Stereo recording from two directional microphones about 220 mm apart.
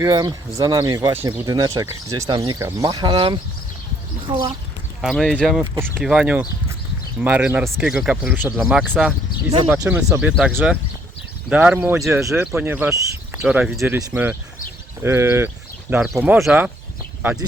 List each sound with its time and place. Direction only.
0.0 s speech: 15° right (ahead or behind)
4.9 s speech: centre (ahead or behind)